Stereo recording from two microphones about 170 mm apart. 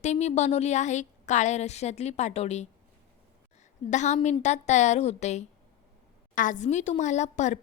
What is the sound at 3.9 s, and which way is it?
A woman's voice, 45° left (ahead or behind).